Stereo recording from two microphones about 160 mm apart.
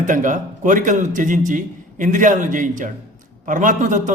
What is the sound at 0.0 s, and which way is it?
A man's voice, 55° right (ahead or behind).